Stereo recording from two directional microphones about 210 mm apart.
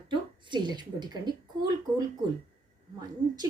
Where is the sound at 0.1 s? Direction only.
20° right (ahead or behind).